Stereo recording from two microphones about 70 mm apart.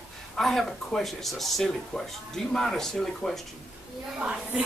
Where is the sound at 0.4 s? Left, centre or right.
Centre.